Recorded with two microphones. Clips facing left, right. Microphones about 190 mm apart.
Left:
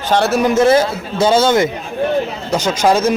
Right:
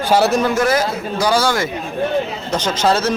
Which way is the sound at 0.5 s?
25° left (ahead or behind).